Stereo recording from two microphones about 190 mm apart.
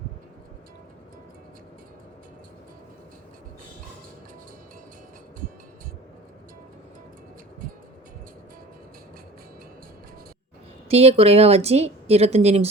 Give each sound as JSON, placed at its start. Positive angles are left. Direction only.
{"t": 10.8, "sound": "speech", "side_deg": -30}